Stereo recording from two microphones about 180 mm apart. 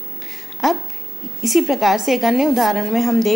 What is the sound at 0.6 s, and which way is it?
A woman's voice, centre (ahead or behind).